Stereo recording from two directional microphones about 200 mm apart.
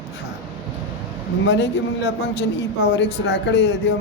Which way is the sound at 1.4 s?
60° left (ahead or behind).